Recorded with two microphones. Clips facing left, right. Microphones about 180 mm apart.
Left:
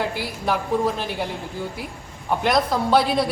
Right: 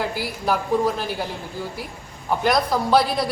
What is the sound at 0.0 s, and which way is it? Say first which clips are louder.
A man's voice: even; centre (ahead or behind).